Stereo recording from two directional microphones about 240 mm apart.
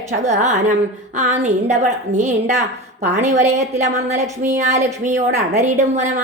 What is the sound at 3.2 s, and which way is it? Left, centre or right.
A woman's voice, right.